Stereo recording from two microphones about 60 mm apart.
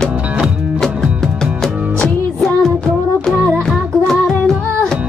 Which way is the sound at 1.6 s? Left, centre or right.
Centre.